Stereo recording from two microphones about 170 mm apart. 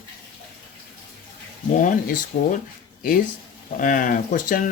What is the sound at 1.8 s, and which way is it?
Speech, 50° left (ahead or behind).